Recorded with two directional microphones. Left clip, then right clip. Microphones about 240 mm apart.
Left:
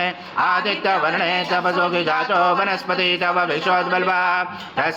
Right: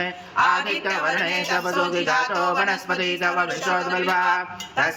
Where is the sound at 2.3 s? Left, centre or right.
Left.